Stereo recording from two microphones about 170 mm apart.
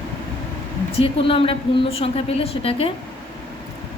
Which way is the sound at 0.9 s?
30° left (ahead or behind).